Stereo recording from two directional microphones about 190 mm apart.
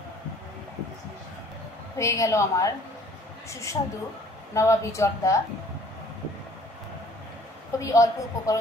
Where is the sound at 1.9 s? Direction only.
15° left (ahead or behind).